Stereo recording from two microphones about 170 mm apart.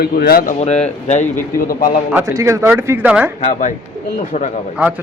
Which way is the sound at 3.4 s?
45° left (ahead or behind).